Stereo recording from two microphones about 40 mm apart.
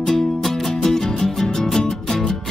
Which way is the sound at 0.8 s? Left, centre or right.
Centre.